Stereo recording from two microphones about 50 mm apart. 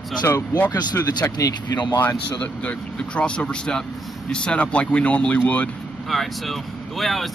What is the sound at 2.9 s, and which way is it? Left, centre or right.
Speech, centre.